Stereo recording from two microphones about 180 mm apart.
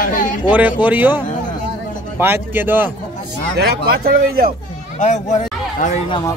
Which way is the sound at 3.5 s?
60° right (ahead or behind).